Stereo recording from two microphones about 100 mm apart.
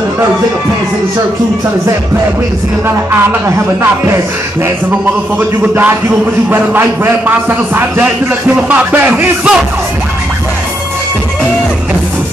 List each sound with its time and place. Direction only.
3.1 s a man's voice: 20° right (ahead or behind)
5.6 s a man's voice: 20° right (ahead or behind)